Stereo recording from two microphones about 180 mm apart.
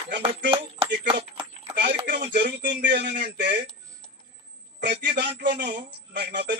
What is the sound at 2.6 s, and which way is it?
Speech, 75° right (ahead or behind).